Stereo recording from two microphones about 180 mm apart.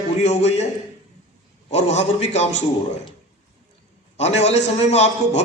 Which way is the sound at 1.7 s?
40° left (ahead or behind).